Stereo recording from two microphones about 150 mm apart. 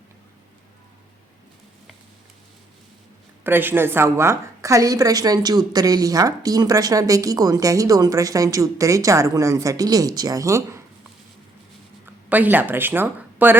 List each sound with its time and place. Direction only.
3.4 s a woman's voice: 15° right (ahead or behind)
12.0 s speech: 10° right (ahead or behind)